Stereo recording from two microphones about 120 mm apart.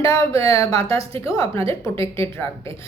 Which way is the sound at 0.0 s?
25° left (ahead or behind).